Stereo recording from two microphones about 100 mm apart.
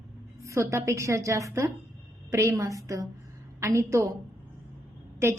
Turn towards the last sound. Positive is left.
turn(degrees=-25)  # may be behind; listen again after turning